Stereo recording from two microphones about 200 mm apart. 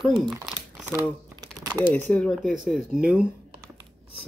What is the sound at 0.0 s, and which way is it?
Speech, centre (ahead or behind).